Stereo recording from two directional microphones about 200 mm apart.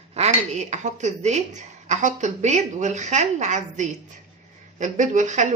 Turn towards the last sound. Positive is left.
turn(degrees=-40)  # may be behind; listen again after turning